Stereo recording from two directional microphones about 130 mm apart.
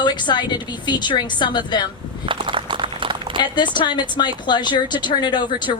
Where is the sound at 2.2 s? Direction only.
40° right (ahead or behind).